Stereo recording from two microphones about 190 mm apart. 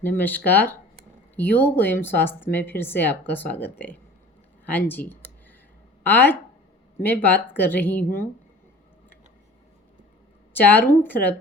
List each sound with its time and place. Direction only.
0.0 s speech: 10° left (ahead or behind)
4.9 s a sound: 10° left (ahead or behind)
6.0 s speech: 10° left (ahead or behind)
10.5 s speech: 10° left (ahead or behind)